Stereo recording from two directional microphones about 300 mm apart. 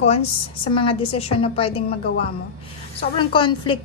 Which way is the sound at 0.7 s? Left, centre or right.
Centre.